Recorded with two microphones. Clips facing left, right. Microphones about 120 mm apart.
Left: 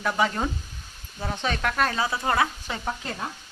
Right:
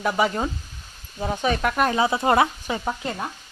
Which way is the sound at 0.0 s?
10° right (ahead or behind).